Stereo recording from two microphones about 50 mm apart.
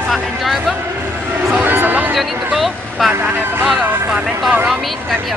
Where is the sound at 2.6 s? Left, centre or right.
Centre.